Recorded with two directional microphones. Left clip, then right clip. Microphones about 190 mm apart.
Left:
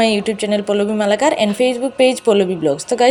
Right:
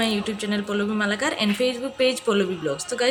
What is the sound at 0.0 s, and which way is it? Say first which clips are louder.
A woman's voice: left 9 dB; 30° left (ahead or behind).